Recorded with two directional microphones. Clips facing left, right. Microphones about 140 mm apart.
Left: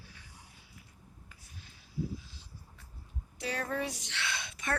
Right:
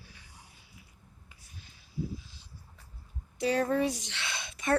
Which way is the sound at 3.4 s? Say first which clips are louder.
Right 8 dB; 25° right (ahead or behind).